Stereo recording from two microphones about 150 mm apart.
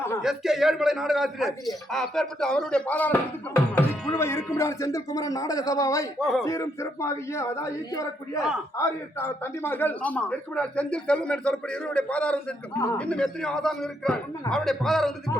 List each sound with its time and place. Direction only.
0.2 s a man's voice: 5° right (ahead or behind); by 6.1 s 20° left (ahead or behind)
6.1 s speech: centre (ahead or behind)
6.4 s a man's voice: 20° left (ahead or behind); by 15.1 s centre (ahead or behind)